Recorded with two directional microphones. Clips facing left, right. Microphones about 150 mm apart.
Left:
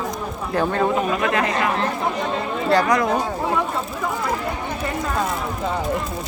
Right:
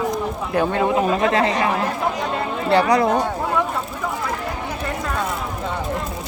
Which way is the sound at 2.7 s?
25° right (ahead or behind).